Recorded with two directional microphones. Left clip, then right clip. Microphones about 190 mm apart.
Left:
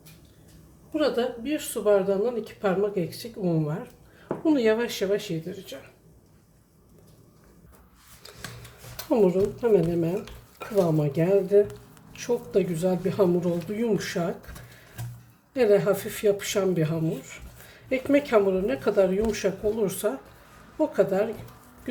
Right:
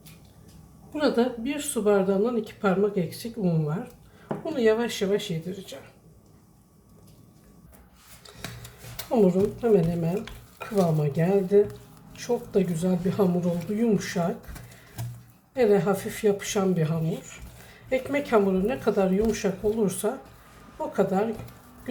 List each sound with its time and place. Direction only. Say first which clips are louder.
0.9 s speech: right 1 dB; 20° left (ahead or behind)
9.1 s speech: even; 25° left (ahead or behind)
15.5 s speech: left 1 dB; 35° left (ahead or behind)